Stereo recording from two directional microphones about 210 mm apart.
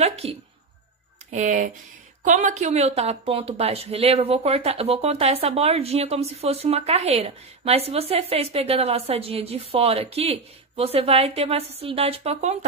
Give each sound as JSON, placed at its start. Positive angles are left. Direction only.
{"t": 0.0, "sound": "speech", "side_deg": -30}